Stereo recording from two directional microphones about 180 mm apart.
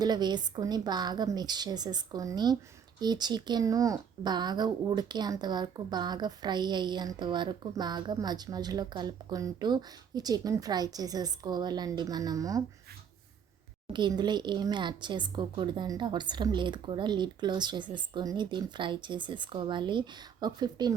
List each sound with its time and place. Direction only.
0.0 s speech: 25° right (ahead or behind)
13.9 s speech: 25° right (ahead or behind)